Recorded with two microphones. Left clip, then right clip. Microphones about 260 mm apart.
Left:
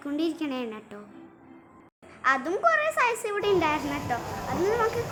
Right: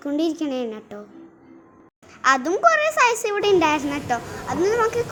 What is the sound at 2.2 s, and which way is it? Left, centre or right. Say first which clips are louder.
A child's voice: right 6 dB; centre.